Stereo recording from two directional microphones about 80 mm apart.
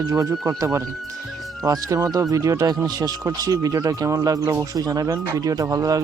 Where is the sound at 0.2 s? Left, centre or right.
Right.